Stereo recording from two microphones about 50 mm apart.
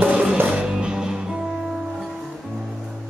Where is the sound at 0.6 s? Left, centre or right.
Centre.